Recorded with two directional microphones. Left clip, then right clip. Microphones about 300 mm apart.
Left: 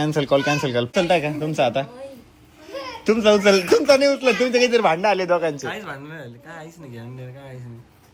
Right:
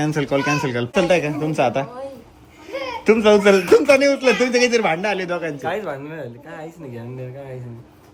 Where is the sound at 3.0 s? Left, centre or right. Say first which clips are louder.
Right 2 dB; centre.